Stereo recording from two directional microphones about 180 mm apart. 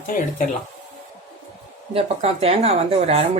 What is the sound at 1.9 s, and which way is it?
Speech, 35° right (ahead or behind).